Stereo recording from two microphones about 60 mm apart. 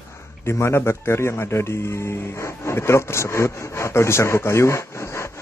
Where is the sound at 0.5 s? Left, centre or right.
Left.